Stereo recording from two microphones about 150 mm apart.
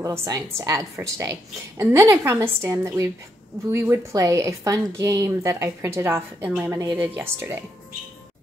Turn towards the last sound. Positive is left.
turn(degrees=-15)  # may be behind; listen again after turning